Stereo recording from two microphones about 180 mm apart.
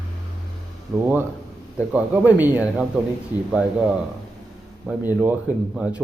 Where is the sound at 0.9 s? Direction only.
5° right (ahead or behind).